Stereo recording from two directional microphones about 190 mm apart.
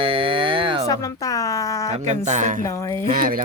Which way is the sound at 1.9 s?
35° right (ahead or behind).